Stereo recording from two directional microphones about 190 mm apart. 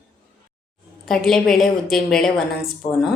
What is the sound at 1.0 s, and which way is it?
Speech, centre (ahead or behind).